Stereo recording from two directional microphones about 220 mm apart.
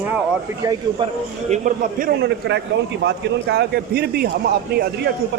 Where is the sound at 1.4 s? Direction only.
35° right (ahead or behind).